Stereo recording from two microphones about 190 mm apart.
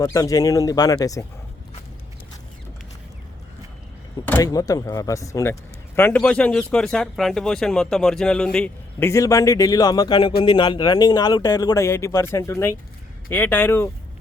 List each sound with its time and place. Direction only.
0.0 s speech: 20° left (ahead or behind)
4.3 s speech: 15° left (ahead or behind)